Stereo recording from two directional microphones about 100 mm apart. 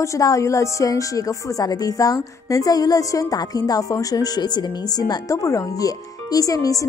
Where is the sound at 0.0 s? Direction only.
35° left (ahead or behind).